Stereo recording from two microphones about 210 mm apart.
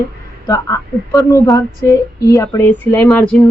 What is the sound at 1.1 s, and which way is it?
A woman's voice, 15° left (ahead or behind).